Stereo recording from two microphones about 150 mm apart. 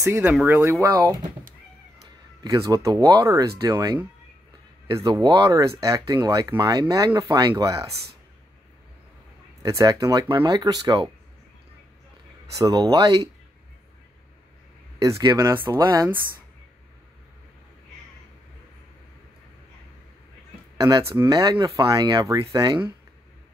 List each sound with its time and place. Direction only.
0.0 s speech: 15° right (ahead or behind)
2.4 s speech: 25° right (ahead or behind)
9.6 s speech: 25° right (ahead or behind)
12.5 s speech: 25° right (ahead or behind)
15.0 s speech: 20° right (ahead or behind)
21.3 s speech: 30° right (ahead or behind)